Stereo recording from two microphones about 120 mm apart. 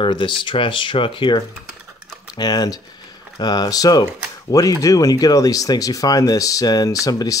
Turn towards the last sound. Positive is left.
turn(degrees=30)  # may be behind; listen again after turning